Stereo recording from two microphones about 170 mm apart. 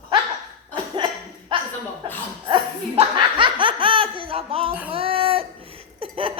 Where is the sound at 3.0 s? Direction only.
30° right (ahead or behind).